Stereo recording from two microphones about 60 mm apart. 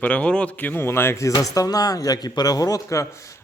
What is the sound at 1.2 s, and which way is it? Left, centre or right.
Speech, left.